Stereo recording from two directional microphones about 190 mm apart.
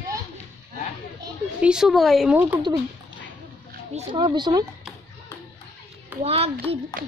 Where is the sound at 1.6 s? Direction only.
5° right (ahead or behind).